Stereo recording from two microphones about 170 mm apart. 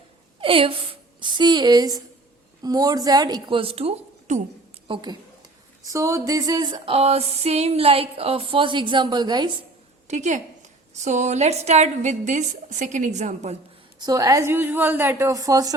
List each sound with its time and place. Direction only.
0.3 s a woman's voice: 30° right (ahead or behind)
4.9 s a woman's voice: 25° right (ahead or behind)
10.1 s a woman's voice: 45° right (ahead or behind)
14.0 s a woman's voice: 20° right (ahead or behind)